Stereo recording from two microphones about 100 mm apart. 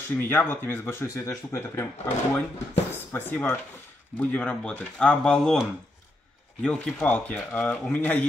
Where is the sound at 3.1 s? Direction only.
20° left (ahead or behind).